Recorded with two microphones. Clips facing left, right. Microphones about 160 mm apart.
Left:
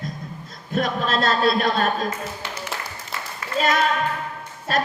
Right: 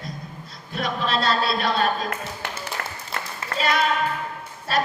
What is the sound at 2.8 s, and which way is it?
Applause, 60° right (ahead or behind).